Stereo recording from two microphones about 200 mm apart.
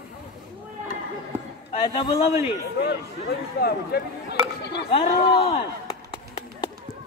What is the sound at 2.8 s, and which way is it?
Speech, 50° left (ahead or behind).